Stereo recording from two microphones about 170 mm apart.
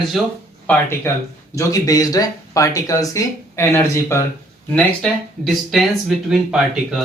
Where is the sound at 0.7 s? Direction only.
15° left (ahead or behind).